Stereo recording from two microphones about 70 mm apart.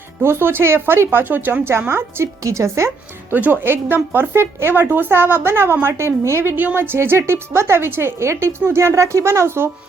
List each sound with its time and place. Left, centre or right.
0.2 s speech: right
3.3 s speech: right
6.6 s speech: right